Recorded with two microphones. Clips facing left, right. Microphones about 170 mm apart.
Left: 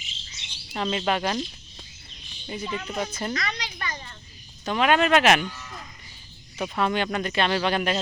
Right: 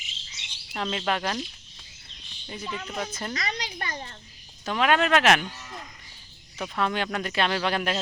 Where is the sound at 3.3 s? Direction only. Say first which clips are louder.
Left 1 dB; 40° right (ahead or behind).